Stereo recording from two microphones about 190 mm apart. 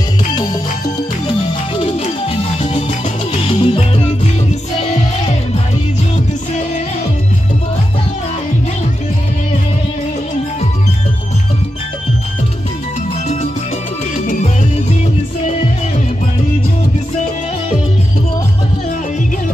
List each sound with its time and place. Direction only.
1.8 s music: 30° left (ahead or behind)
14.1 s music: 35° left (ahead or behind)